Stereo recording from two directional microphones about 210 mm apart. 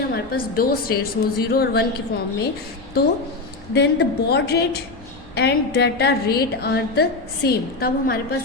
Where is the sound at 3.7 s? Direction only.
50° left (ahead or behind).